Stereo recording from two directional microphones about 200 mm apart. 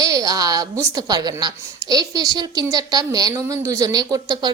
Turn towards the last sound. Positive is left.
turn(degrees=-20)  # may be behind; listen again after turning